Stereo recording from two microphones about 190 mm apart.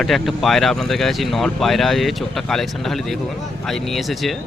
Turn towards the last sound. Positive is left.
turn(degrees=0)  # may be behind; listen again after turning